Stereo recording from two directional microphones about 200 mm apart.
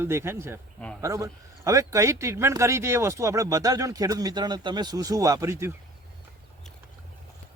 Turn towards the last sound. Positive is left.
turn(degrees=-15)  # may be behind; listen again after turning